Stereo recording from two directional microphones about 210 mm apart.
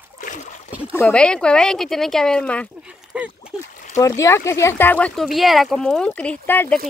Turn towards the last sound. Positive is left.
turn(degrees=10)  # may be behind; listen again after turning